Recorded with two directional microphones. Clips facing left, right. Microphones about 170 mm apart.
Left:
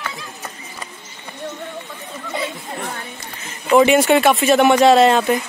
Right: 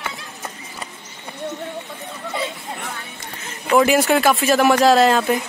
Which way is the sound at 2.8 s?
55° left (ahead or behind).